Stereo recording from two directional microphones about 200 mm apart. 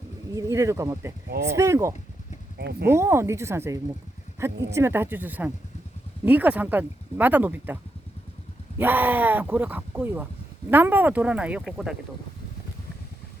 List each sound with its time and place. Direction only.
0.3 s speech: 15° right (ahead or behind)
2.6 s speech: 55° right (ahead or behind)
2.8 s speech: 15° right (ahead or behind)
8.8 s speech: 10° right (ahead or behind)